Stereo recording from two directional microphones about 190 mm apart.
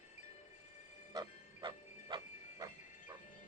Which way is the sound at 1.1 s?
25° right (ahead or behind).